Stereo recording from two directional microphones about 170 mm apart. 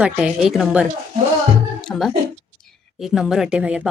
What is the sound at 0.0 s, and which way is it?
A woman's voice, 5° right (ahead or behind).